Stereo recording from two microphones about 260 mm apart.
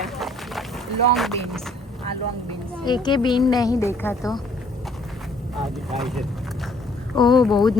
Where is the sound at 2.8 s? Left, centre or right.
Centre.